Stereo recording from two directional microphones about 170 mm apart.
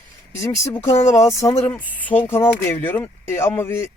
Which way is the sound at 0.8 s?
40° left (ahead or behind).